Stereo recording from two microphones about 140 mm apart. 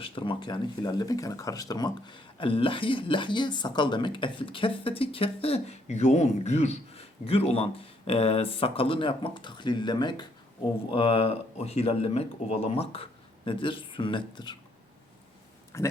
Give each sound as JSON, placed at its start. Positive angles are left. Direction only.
{"t": 0.0, "sound": "speech", "side_deg": 40}
{"t": 10.9, "sound": "speech", "side_deg": 45}
{"t": 15.7, "sound": "speech", "side_deg": 20}